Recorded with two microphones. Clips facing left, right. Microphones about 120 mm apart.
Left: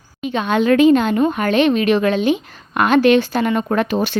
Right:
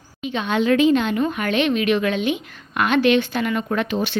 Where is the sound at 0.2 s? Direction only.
45° left (ahead or behind).